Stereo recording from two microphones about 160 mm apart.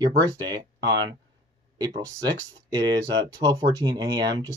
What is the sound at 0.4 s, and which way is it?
Speech, 25° right (ahead or behind).